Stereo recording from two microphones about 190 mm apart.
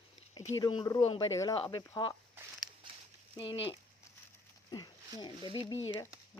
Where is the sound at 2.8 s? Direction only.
25° right (ahead or behind).